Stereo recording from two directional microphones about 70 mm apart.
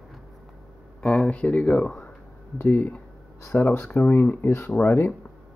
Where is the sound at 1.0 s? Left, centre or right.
Centre.